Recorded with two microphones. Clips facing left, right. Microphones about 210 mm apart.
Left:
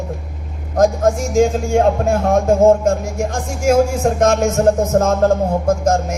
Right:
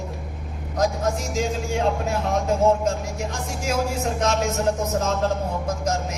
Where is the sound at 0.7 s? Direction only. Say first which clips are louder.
Left 9 dB; 50° left (ahead or behind).